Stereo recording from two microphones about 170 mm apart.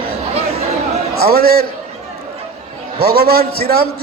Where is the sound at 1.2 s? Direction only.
65° right (ahead or behind).